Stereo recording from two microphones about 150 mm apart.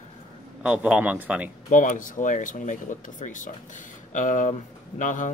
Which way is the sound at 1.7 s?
60° left (ahead or behind).